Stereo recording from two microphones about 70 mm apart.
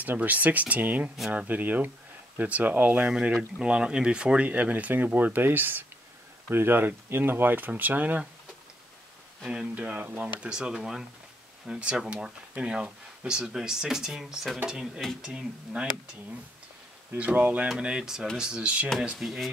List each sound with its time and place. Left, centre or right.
0.0 s speech: right
9.5 s speech: centre
9.8 s speech: right
17.2 s speech: right
19.1 s speech: centre